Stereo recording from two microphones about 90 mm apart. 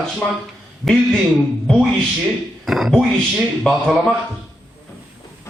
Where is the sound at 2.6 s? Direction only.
Centre (ahead or behind).